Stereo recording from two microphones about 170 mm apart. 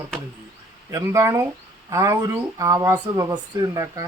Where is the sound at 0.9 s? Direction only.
15° right (ahead or behind).